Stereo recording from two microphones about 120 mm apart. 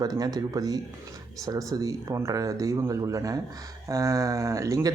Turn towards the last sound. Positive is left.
turn(degrees=-25)  # may be behind; listen again after turning